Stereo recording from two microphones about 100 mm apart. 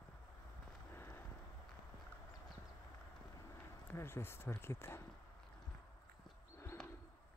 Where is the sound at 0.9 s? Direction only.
25° left (ahead or behind).